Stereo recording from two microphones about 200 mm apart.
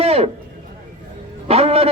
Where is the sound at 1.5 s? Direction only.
30° right (ahead or behind).